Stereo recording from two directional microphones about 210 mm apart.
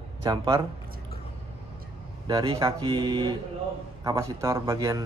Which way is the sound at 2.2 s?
20° right (ahead or behind).